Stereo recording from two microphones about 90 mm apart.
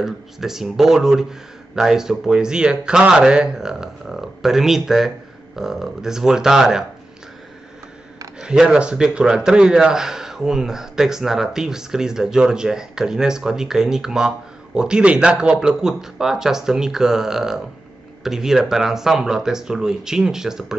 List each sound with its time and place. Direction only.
0.0 s a man's voice: 5° right (ahead or behind)
8.4 s a man's voice: 10° right (ahead or behind)